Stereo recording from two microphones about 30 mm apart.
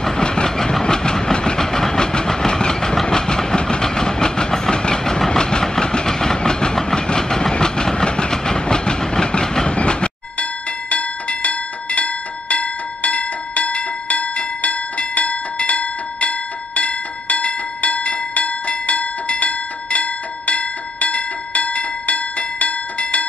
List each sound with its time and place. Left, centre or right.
0.0 s train: left
9.7 s train: left
10.9 s bell: left
18.7 s a sound: left